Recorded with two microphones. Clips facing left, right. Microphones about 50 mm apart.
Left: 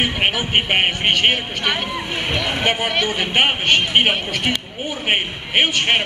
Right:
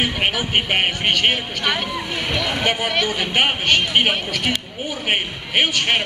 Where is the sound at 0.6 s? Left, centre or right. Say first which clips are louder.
Left 2 dB; centre.